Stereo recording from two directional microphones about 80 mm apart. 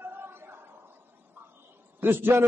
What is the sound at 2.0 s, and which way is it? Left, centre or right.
Speech, right.